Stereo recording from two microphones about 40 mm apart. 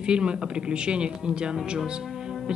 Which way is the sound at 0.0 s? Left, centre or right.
Right.